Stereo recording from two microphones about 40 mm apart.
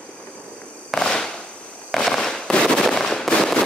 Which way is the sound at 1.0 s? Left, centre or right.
Centre.